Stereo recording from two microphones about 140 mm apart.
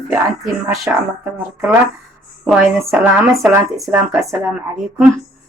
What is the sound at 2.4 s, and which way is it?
Speech, 15° right (ahead or behind).